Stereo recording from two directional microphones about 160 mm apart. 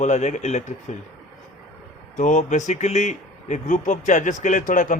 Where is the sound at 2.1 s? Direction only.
50° left (ahead or behind).